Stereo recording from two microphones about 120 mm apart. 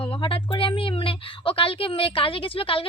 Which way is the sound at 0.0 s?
45° left (ahead or behind).